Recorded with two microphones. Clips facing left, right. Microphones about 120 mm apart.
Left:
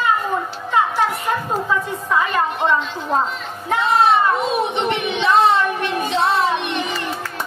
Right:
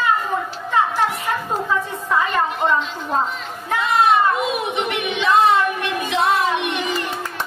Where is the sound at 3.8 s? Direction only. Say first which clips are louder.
Left 1 dB; 30° left (ahead or behind).